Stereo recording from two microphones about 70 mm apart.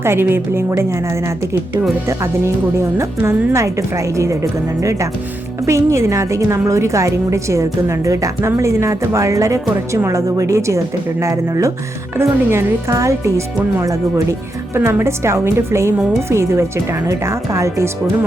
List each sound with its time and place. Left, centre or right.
0.0 s a woman's voice: right
12.1 s a woman's voice: right